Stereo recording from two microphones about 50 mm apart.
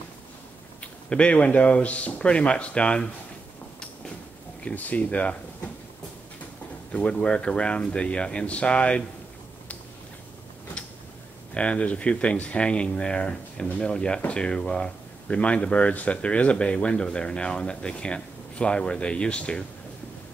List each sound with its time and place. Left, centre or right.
1.1 s speech: left
4.6 s speech: left
6.9 s speech: left
11.5 s speech: left